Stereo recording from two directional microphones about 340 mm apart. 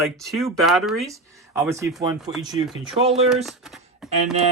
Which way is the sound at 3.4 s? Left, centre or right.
Centre.